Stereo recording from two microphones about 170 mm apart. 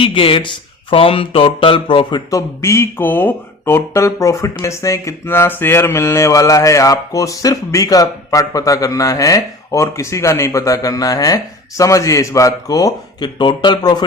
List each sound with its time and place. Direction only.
0.0 s speech: 30° left (ahead or behind)